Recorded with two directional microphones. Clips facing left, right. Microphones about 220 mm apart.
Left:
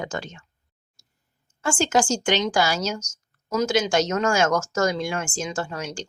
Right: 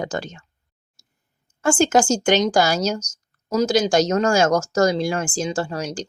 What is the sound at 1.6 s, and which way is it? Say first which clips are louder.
A woman's voice: right 5 dB; 45° right (ahead or behind).